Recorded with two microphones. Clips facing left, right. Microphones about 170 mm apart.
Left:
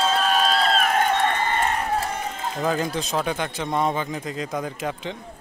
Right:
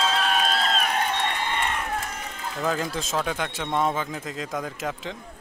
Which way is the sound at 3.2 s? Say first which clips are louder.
Left 2 dB; centre (ahead or behind).